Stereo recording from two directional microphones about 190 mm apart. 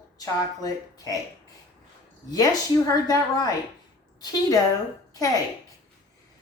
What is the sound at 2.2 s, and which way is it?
A woman's voice, 20° left (ahead or behind).